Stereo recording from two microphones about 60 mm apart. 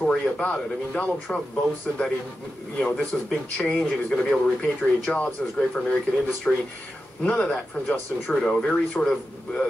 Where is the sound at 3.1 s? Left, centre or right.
Centre.